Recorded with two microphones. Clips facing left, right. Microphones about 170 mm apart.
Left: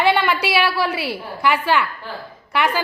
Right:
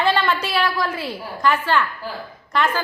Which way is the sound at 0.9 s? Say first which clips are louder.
Left 3 dB; 75° left (ahead or behind).